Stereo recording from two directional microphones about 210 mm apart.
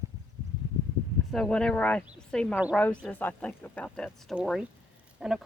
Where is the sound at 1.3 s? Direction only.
5° left (ahead or behind).